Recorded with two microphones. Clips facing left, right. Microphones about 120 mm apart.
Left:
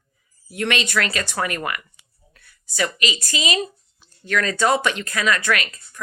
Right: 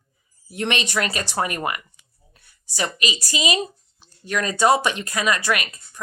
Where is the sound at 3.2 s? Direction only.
20° right (ahead or behind).